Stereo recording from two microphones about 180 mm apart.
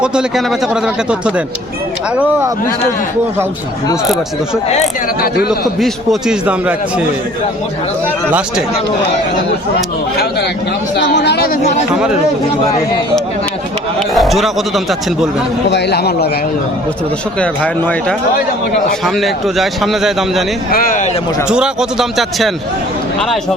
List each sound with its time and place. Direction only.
0.0 s a man's voice: 5° right (ahead or behind)
5.5 s a man's voice: centre (ahead or behind)
8.3 s a man's voice: 5° right (ahead or behind)
10.2 s a man's voice: 65° left (ahead or behind)
14.1 s a man's voice: centre (ahead or behind)
15.7 s a man's voice: 70° left (ahead or behind)
17.4 s a man's voice: 5° left (ahead or behind)
20.7 s speech: 50° left (ahead or behind)
21.4 s a man's voice: 5° right (ahead or behind)